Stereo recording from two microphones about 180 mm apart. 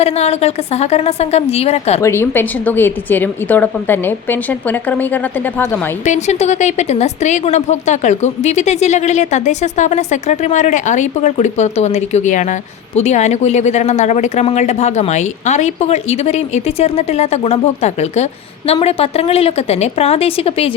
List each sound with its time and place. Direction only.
0.0 s speech: 35° left (ahead or behind)
2.0 s a woman's voice: 15° left (ahead or behind)
6.1 s speech: 40° left (ahead or behind)